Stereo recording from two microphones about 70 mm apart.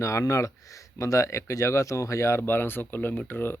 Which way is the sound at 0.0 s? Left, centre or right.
Left.